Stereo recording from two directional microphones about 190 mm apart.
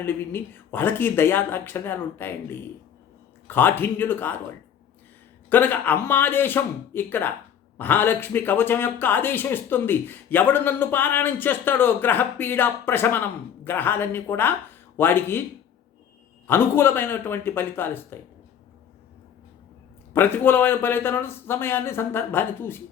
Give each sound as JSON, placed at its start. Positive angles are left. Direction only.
{"t": 0.0, "sound": "speech", "side_deg": 10}
{"t": 5.5, "sound": "speech", "side_deg": 10}
{"t": 16.5, "sound": "speech", "side_deg": 10}
{"t": 20.1, "sound": "speech", "side_deg": 10}